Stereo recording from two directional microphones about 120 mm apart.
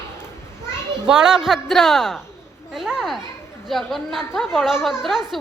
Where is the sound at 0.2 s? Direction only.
20° left (ahead or behind).